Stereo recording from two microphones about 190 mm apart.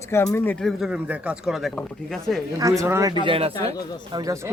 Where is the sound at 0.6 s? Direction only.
5° right (ahead or behind).